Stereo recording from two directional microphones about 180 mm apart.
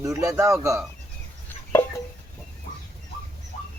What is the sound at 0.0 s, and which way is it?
Speech, 20° right (ahead or behind).